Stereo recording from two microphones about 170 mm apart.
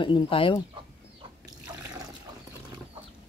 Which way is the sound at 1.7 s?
20° right (ahead or behind).